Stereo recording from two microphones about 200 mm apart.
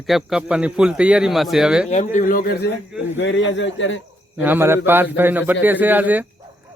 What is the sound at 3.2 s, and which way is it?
Speech, 65° left (ahead or behind).